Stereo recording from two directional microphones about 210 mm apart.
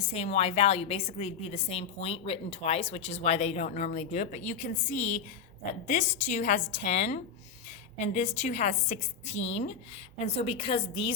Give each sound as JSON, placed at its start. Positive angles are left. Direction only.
{"t": 0.1, "sound": "a woman's voice", "side_deg": 30}